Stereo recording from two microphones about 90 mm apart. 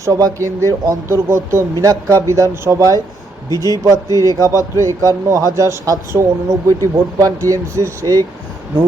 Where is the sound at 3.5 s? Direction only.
45° left (ahead or behind).